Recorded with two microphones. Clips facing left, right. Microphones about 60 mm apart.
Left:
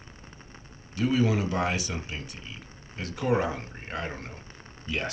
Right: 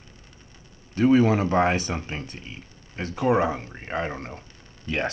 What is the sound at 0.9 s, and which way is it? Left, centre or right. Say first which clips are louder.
Speech: right 7 dB; right.